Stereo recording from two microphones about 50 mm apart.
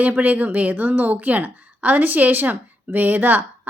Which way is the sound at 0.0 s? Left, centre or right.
Right.